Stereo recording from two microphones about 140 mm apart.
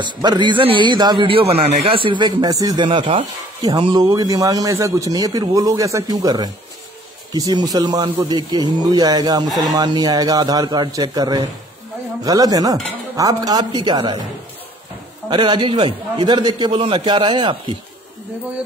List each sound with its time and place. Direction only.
0.0 s a man's voice: 30° right (ahead or behind)
15.2 s a man's voice: 35° right (ahead or behind)